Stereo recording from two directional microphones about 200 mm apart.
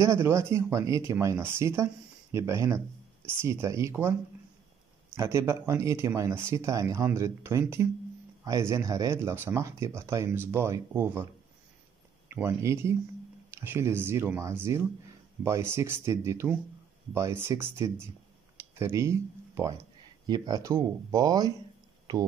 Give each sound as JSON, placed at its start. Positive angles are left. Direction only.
{"t": 0.0, "sound": "speech", "side_deg": -15}
{"t": 5.1, "sound": "speech", "side_deg": -15}
{"t": 12.3, "sound": "speech", "side_deg": -10}